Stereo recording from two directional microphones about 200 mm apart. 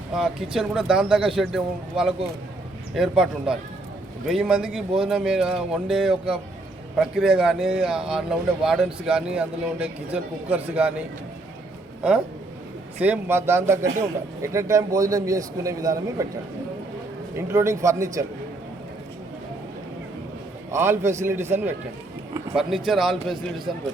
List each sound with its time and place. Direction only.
0.1 s speech: 5° right (ahead or behind)
13.0 s a man's voice: 10° right (ahead or behind)
17.3 s a man's voice: 15° right (ahead or behind)
20.7 s a man's voice: 10° right (ahead or behind)
22.9 s speech: centre (ahead or behind)